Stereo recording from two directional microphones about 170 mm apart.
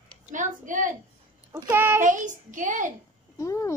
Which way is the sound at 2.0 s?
50° right (ahead or behind).